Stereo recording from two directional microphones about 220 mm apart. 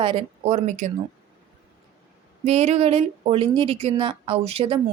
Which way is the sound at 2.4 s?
30° right (ahead or behind).